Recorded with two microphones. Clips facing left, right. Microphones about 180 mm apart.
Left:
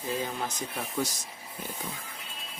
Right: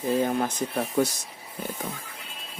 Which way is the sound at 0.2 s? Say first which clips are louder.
Right 8 dB; 55° right (ahead or behind).